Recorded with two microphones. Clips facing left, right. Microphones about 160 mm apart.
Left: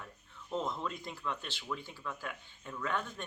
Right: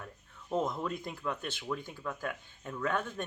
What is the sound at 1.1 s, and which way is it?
Speech, 45° right (ahead or behind).